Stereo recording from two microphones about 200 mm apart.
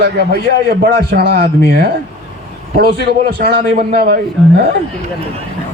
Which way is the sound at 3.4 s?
50° right (ahead or behind).